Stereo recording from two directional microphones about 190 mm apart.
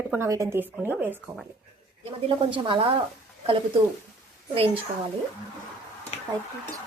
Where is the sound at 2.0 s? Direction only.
25° right (ahead or behind).